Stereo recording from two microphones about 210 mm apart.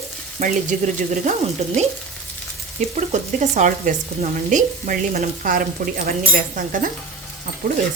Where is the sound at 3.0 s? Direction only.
35° right (ahead or behind).